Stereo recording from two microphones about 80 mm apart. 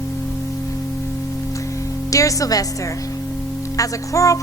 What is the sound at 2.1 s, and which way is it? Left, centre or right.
Speech, left.